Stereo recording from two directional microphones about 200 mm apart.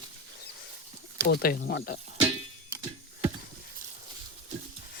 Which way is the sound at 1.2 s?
50° left (ahead or behind).